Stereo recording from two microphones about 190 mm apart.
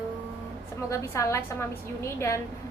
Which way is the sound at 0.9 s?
15° left (ahead or behind).